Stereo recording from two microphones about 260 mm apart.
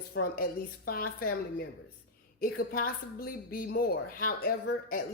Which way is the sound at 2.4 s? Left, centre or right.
Left.